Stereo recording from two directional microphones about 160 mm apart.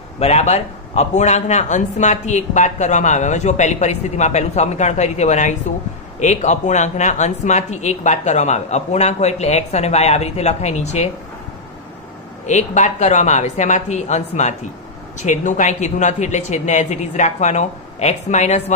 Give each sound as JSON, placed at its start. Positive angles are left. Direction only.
{"t": 0.2, "sound": "a man's voice", "side_deg": 40}
{"t": 12.4, "sound": "a man's voice", "side_deg": 45}